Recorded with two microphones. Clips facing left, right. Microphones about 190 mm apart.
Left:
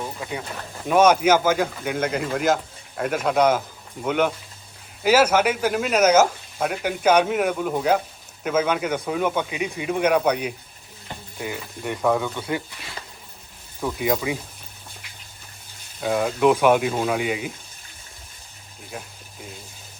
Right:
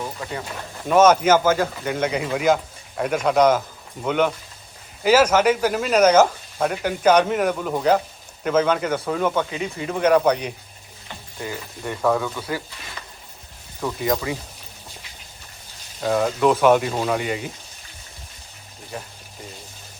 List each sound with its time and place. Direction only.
0.2 s speech: 5° left (ahead or behind); by 12.6 s 20° left (ahead or behind)
13.8 s speech: 5° left (ahead or behind)
16.0 s speech: centre (ahead or behind)
18.9 s a sound: centre (ahead or behind)